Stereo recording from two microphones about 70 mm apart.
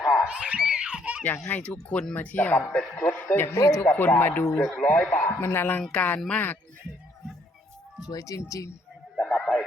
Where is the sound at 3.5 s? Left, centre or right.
Left.